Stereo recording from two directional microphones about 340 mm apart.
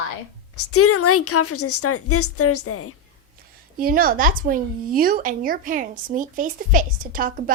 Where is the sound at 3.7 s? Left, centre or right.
Right.